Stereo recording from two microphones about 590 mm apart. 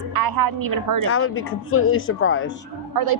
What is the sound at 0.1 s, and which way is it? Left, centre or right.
Speech, right.